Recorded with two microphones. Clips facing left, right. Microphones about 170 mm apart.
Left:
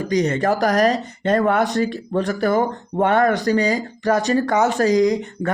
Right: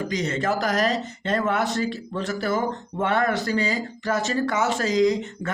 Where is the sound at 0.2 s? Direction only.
45° left (ahead or behind).